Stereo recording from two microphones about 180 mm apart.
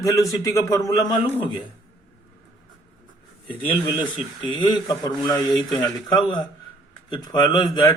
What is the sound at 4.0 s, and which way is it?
Speech, 25° left (ahead or behind).